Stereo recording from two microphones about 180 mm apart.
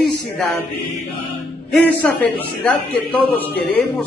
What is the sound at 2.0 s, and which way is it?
A man's voice, 10° left (ahead or behind).